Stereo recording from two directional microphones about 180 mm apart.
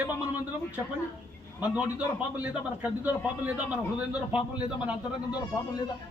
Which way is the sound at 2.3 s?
10° right (ahead or behind).